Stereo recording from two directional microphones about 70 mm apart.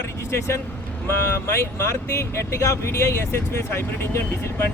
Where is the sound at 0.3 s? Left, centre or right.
Left.